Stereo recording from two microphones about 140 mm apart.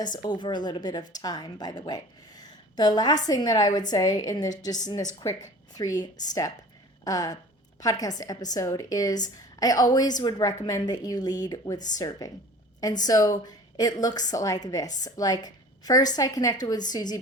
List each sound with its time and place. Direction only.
0.0 s a woman's voice: 30° left (ahead or behind)